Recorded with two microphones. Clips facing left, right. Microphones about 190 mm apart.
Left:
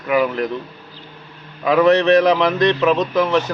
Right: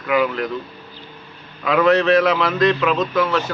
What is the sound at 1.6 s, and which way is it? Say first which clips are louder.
A man's voice: left 2 dB; 20° left (ahead or behind).